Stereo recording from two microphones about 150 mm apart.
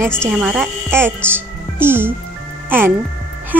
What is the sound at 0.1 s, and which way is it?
Speech, centre (ahead or behind).